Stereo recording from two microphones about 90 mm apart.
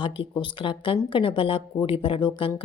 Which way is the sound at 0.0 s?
70° left (ahead or behind).